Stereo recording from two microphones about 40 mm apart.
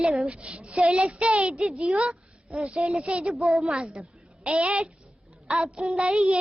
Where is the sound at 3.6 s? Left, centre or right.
Right.